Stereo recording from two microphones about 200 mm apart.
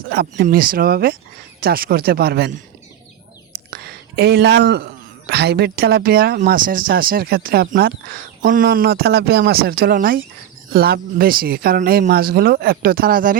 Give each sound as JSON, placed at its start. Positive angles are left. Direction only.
{"t": 0.1, "sound": "speech", "side_deg": -50}
{"t": 3.7, "sound": "speech", "side_deg": -55}